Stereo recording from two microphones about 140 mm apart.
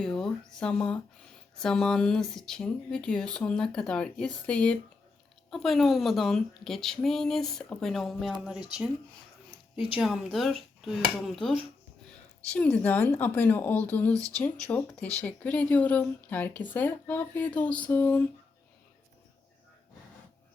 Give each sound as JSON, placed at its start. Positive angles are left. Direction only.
{"t": 0.0, "sound": "speech", "side_deg": 5}
{"t": 10.0, "sound": "speech", "side_deg": 0}
{"t": 12.5, "sound": "speech", "side_deg": 10}
{"t": 14.1, "sound": "speech", "side_deg": -25}
{"t": 15.2, "sound": "speech", "side_deg": 10}